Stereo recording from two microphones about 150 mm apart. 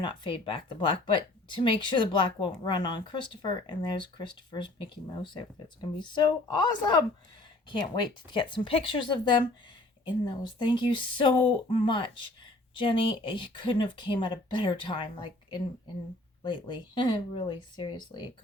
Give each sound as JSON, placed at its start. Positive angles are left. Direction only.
{"t": 0.0, "sound": "speech", "side_deg": 35}
{"t": 5.2, "sound": "speech", "side_deg": 30}
{"t": 8.3, "sound": "speech", "side_deg": 35}